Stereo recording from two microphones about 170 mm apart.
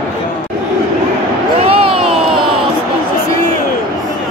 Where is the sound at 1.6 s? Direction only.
35° right (ahead or behind).